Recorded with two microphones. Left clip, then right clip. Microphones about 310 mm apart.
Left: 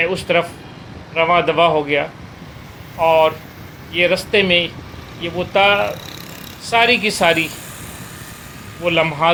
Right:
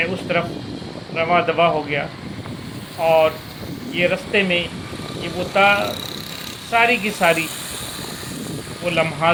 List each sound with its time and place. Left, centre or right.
0.0 s speech: left
8.8 s speech: left